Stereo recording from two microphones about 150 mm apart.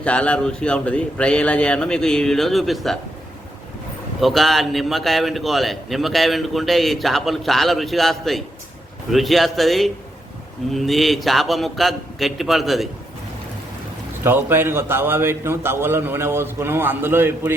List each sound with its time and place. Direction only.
0.0 s a man's voice: 10° left (ahead or behind)
4.2 s a man's voice: centre (ahead or behind)
14.3 s a man's voice: 15° right (ahead or behind)